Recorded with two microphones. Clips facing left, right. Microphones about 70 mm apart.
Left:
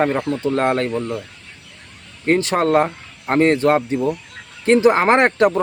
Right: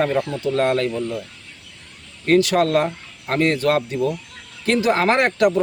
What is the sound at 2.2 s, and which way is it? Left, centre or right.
Speech, left.